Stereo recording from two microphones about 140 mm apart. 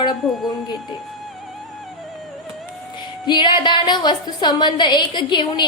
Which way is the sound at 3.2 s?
35° left (ahead or behind).